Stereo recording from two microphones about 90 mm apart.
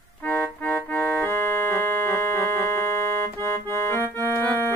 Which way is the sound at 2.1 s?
25° left (ahead or behind).